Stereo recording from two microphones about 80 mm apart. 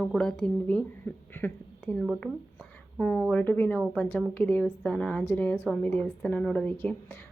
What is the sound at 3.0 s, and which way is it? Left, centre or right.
A woman's voice, centre.